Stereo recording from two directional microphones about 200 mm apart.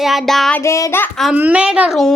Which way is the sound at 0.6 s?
15° left (ahead or behind).